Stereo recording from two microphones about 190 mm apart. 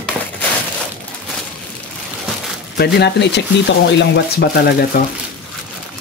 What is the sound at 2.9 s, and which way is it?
Speech, 60° left (ahead or behind).